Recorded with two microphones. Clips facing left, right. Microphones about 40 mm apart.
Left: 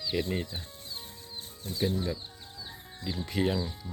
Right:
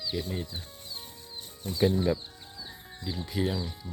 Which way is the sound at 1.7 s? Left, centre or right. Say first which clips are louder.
Right 5 dB; right.